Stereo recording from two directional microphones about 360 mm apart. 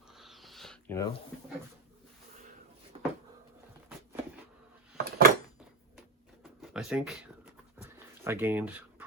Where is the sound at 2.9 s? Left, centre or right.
Centre.